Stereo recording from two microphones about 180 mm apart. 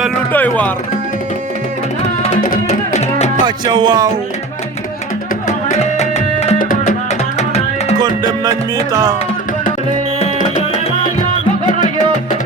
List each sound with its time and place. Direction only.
0.3 s speech: 10° left (ahead or behind)
2.6 s music: 40° left (ahead or behind)
3.4 s music: 25° right (ahead or behind)
5.7 s tabla: 35° left (ahead or behind)
6.6 s music: 50° left (ahead or behind)
7.3 s music: 35° left (ahead or behind)
7.9 s music: 20° right (ahead or behind)